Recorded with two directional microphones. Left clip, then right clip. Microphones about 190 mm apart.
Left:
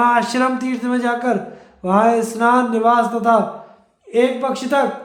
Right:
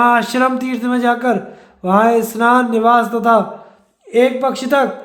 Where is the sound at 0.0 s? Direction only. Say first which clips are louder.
Right 3 dB; 25° right (ahead or behind).